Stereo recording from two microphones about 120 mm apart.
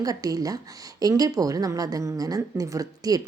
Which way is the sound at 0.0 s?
30° right (ahead or behind).